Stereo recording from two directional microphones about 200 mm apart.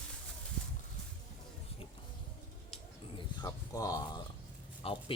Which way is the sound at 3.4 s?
20° left (ahead or behind).